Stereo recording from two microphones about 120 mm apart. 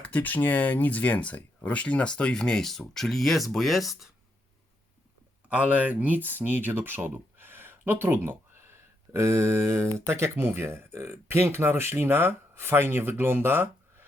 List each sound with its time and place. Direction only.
0.0 s speech: 15° left (ahead or behind)
5.5 s speech: 15° right (ahead or behind)